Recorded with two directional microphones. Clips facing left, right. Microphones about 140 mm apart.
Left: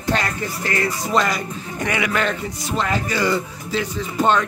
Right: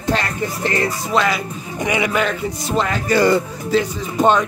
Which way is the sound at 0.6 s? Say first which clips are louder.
Right 2 dB; 25° right (ahead or behind).